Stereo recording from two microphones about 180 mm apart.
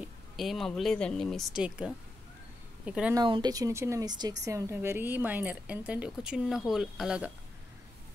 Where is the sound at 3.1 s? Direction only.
25° right (ahead or behind); by 7.3 s 5° right (ahead or behind).